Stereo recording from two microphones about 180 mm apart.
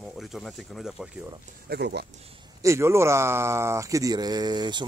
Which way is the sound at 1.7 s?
65° right (ahead or behind).